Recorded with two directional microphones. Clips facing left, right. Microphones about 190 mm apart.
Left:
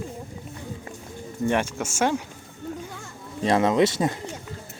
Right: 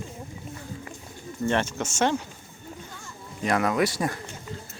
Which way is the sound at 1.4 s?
10° left (ahead or behind).